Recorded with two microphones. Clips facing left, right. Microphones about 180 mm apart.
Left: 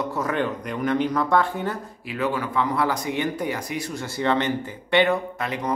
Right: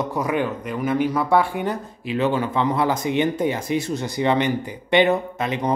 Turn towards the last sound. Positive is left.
turn(degrees=-20)  # may be behind; listen again after turning